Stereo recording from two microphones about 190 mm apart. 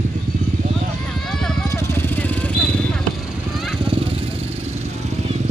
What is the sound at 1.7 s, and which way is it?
Vehicle, 15° left (ahead or behind).